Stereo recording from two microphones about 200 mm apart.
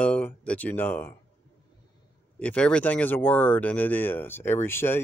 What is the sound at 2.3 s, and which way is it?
Speech, 5° left (ahead or behind).